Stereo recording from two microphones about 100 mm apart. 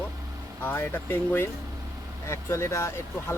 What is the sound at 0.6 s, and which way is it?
Speech, 20° left (ahead or behind).